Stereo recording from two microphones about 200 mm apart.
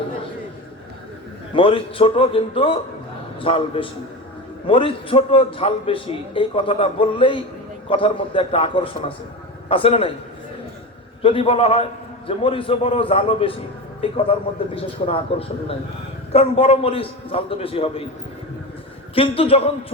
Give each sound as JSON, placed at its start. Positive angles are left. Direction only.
{"t": 1.5, "sound": "a man's voice", "side_deg": 25}
{"t": 11.2, "sound": "a man's voice", "side_deg": 25}
{"t": 19.1, "sound": "a man's voice", "side_deg": 30}